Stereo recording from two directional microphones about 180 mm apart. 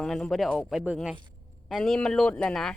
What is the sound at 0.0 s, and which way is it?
Speech, centre (ahead or behind).